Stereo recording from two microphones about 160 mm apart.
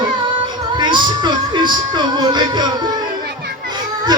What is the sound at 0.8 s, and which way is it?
Music, 30° right (ahead or behind).